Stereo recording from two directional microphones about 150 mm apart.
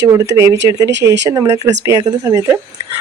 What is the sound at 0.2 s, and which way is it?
Speech, 20° right (ahead or behind).